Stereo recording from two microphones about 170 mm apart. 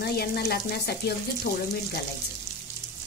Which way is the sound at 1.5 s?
65° left (ahead or behind).